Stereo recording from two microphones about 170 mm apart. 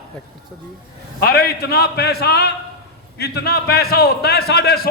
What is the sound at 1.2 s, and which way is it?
A man's voice, 65° left (ahead or behind).